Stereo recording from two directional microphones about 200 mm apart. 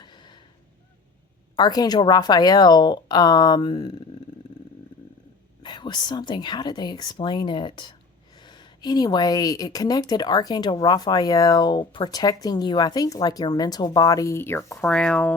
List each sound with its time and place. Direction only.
0.0 s a sound: 20° left (ahead or behind)
1.5 s speech: 20° left (ahead or behind)
5.6 s speech: 20° left (ahead or behind); by 15.4 s 5° left (ahead or behind)